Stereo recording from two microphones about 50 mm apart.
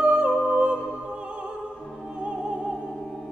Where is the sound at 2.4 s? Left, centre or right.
Centre.